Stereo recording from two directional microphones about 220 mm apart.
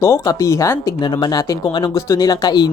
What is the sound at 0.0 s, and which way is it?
Speech, 15° left (ahead or behind).